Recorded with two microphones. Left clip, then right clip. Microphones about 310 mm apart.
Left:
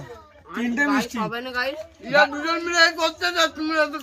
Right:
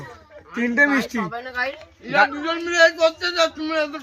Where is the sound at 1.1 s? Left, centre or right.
Left.